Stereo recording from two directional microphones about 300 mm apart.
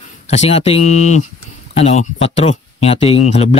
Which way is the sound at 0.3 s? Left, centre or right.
Left.